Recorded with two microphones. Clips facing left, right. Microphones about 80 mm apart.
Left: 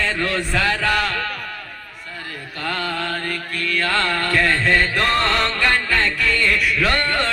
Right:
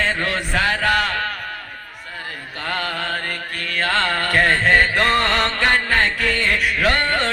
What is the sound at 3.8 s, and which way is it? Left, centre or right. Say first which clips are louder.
Music: right 2 dB; right.